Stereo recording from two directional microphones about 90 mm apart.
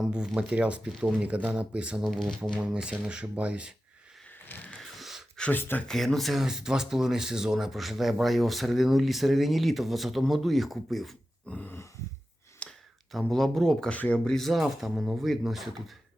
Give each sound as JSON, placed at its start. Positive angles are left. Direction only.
{"t": 0.0, "sound": "speech", "side_deg": -10}
{"t": 2.1, "sound": "a sound", "side_deg": 10}
{"t": 2.6, "sound": "speech", "side_deg": -10}
{"t": 4.4, "sound": "vehicle", "side_deg": 20}
{"t": 4.8, "sound": "wheeze", "side_deg": 0}
{"t": 5.4, "sound": "speech", "side_deg": 20}
{"t": 5.8, "sound": "speech", "side_deg": 5}
{"t": 11.4, "sound": "a sound", "side_deg": 15}
{"t": 12.5, "sound": "a sound", "side_deg": 5}
{"t": 13.9, "sound": "speech", "side_deg": 15}